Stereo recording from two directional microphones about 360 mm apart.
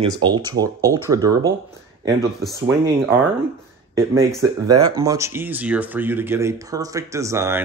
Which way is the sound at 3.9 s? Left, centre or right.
Centre.